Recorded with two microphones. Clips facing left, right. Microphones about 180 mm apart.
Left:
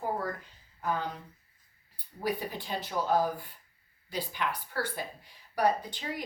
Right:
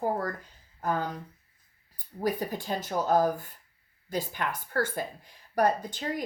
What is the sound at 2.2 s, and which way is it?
Speech, 45° right (ahead or behind).